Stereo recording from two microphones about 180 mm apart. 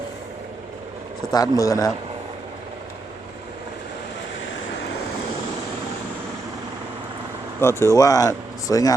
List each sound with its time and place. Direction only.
1.3 s speech: 20° left (ahead or behind)
7.6 s speech: 15° left (ahead or behind)